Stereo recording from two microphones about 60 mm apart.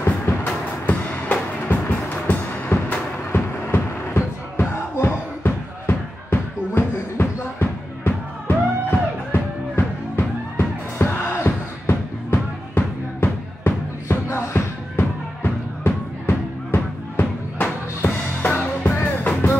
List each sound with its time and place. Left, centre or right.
0.0 s music: left
14.0 s music: left
15.0 s music: left